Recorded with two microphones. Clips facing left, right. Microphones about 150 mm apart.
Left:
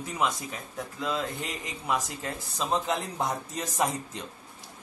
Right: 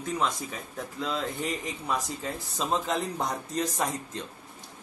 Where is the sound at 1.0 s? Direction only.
Centre (ahead or behind).